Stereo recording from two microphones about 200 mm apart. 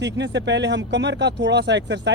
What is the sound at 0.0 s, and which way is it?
Speech, 60° right (ahead or behind).